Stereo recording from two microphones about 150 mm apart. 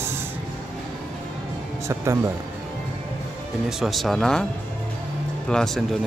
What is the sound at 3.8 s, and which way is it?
Speech, centre (ahead or behind).